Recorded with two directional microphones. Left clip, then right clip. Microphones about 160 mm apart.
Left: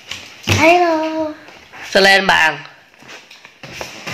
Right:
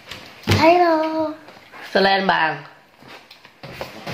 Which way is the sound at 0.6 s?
30° left (ahead or behind).